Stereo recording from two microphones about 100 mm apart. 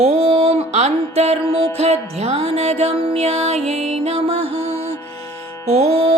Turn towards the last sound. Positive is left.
turn(degrees=-80)